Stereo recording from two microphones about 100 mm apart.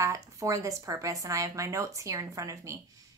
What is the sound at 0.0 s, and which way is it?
A woman's voice, 30° right (ahead or behind).